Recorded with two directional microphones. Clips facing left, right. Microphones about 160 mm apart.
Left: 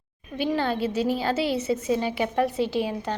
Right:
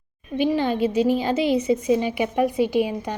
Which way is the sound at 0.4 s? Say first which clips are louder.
Right 4 dB; 15° right (ahead or behind).